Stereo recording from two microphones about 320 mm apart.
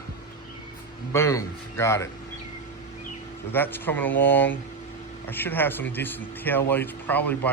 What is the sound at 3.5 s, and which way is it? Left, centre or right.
Speech, centre.